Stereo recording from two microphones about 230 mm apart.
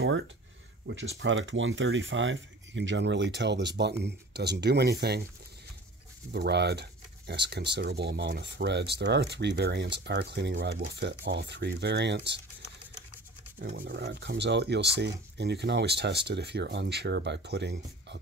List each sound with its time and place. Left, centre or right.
0.8 s speech: right
6.3 s speech: right
13.6 s speech: right